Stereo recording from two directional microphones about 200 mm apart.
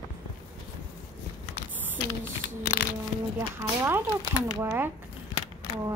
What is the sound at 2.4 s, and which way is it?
Speech, 55° left (ahead or behind).